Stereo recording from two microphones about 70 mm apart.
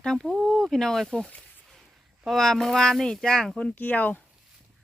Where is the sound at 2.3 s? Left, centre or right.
Centre.